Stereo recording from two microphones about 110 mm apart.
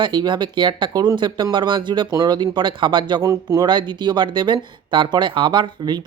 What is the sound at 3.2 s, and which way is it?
Speech, 30° right (ahead or behind).